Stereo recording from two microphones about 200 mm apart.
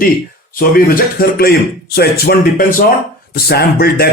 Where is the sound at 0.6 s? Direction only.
45° left (ahead or behind).